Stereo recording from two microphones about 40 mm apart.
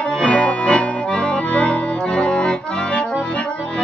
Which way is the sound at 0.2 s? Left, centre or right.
Left.